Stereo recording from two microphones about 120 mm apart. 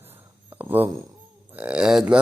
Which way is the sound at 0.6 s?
15° right (ahead or behind).